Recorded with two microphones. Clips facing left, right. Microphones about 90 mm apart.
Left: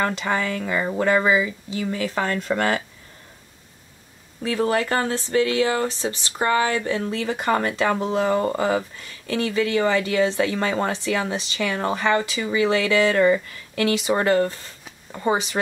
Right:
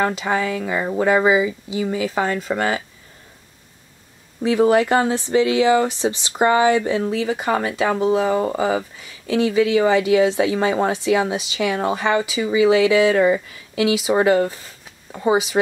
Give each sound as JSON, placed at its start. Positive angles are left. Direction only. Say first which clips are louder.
{"t": 0.0, "sound": "speech", "louder": "right 3 dB", "side_deg": -5}
{"t": 4.4, "sound": "speech", "louder": "right 6 dB", "side_deg": -15}